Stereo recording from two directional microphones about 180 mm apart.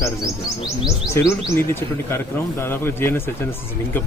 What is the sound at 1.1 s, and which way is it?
Speech, 15° left (ahead or behind).